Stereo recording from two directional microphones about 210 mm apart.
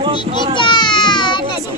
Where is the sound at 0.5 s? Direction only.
20° left (ahead or behind).